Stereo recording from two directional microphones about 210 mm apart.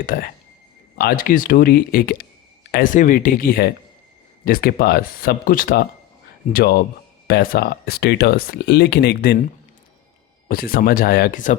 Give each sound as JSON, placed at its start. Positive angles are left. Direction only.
{"t": 0.0, "sound": "speech", "side_deg": 40}
{"t": 10.5, "sound": "speech", "side_deg": 45}